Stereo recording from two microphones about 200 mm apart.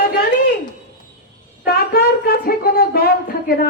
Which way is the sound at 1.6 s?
50° left (ahead or behind).